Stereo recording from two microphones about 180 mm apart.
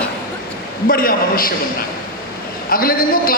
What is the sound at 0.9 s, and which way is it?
Speech, 50° left (ahead or behind).